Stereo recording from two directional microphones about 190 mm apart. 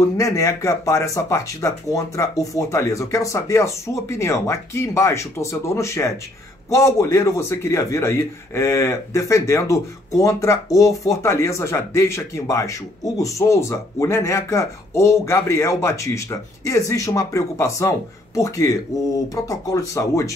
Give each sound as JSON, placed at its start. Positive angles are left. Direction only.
{"t": 0.0, "sound": "speech", "side_deg": 15}